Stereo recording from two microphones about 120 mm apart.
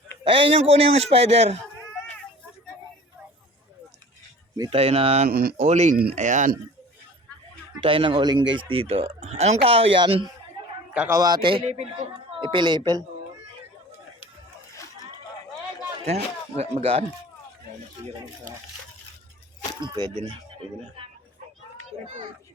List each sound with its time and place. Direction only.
0.3 s a man's voice: 50° right (ahead or behind)
4.7 s speech: 50° right (ahead or behind)
5.2 s speech: 70° right (ahead or behind); by 6.5 s 90° right
7.8 s speech: 45° right (ahead or behind)
11.1 s a man's voice: 30° right (ahead or behind)
11.4 s speech: 55° right (ahead or behind); by 13.1 s 35° right (ahead or behind)
16.0 s a man's voice: 60° right (ahead or behind)
19.8 s speech: 40° right (ahead or behind)